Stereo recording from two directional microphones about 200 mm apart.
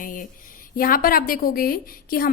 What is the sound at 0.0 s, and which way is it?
A woman's voice, 40° left (ahead or behind).